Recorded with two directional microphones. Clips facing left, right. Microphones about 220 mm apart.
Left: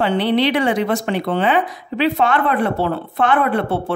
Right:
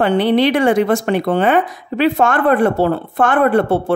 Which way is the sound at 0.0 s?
50° right (ahead or behind).